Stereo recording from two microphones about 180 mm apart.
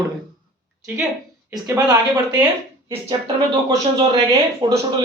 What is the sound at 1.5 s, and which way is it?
Speech, 15° right (ahead or behind).